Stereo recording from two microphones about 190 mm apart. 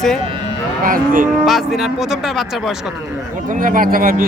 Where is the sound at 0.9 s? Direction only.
45° right (ahead or behind).